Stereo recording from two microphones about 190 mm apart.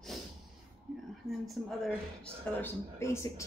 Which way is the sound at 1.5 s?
5° left (ahead or behind).